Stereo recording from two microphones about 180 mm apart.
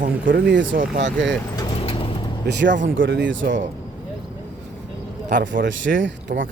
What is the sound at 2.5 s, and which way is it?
Speech, 75° right (ahead or behind).